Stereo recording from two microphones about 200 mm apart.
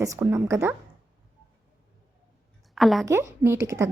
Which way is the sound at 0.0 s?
15° right (ahead or behind).